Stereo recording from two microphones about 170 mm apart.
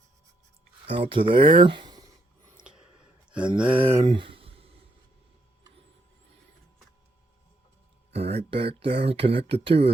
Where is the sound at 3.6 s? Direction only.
5° right (ahead or behind).